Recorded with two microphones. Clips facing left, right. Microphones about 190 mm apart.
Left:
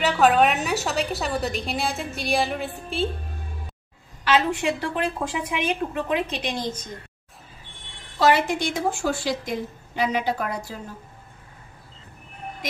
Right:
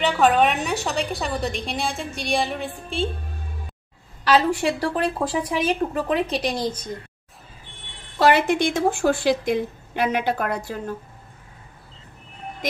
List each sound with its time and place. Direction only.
0.0 s a woman's voice: centre (ahead or behind)
4.2 s a woman's voice: 35° right (ahead or behind)
8.2 s a woman's voice: 60° right (ahead or behind)